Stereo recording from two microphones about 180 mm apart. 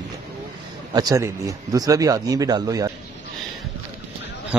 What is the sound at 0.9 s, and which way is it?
Speech, 20° right (ahead or behind).